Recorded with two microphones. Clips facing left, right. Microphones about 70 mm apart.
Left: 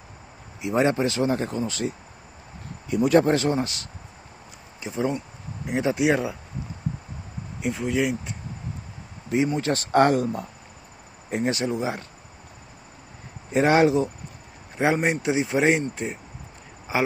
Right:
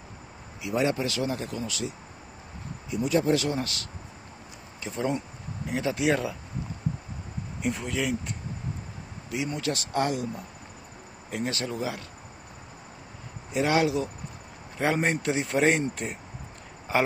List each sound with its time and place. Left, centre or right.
0.6 s speech: left
2.9 s speech: left
3.3 s speech: left
4.8 s speech: centre
7.6 s speech: centre
9.6 s speech: left
11.2 s speech: left
13.5 s speech: left
14.8 s a man's voice: centre